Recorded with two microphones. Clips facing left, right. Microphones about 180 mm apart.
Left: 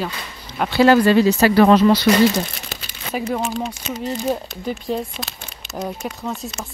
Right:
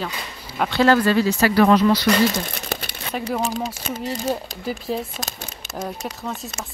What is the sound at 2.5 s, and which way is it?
Crumpling, 55° right (ahead or behind).